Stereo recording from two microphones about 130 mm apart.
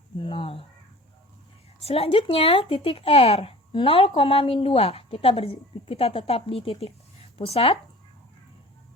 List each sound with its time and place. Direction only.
0.3 s speech: 45° left (ahead or behind)
1.8 s speech: 50° left (ahead or behind)